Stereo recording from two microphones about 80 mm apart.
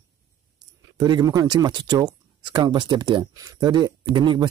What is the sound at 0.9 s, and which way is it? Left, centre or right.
A man's voice, right.